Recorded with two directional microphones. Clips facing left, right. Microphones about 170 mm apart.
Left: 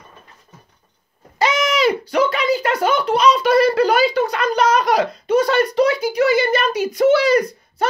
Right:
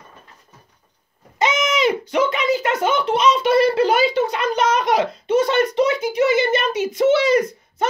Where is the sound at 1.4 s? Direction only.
20° right (ahead or behind).